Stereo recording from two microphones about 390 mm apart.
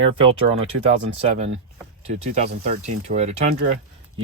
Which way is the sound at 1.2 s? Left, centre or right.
Centre.